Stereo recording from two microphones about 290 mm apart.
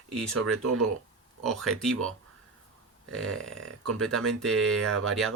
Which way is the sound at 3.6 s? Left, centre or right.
Right.